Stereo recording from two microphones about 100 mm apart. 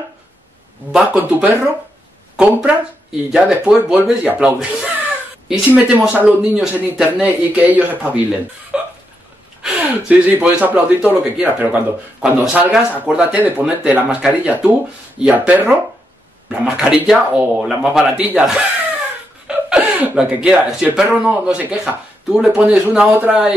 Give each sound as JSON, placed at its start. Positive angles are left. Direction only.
{"t": 0.9, "sound": "speech", "side_deg": -15}
{"t": 8.7, "sound": "hiccup", "side_deg": -10}
{"t": 9.6, "sound": "speech", "side_deg": -10}